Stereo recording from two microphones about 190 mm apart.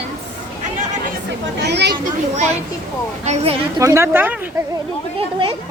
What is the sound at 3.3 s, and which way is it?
Speech, 35° right (ahead or behind).